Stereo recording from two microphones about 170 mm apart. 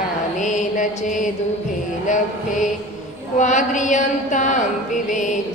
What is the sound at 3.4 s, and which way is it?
Music, 45° left (ahead or behind).